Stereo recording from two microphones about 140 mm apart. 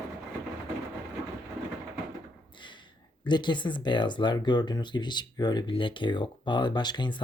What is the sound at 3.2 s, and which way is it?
Speech, 35° left (ahead or behind).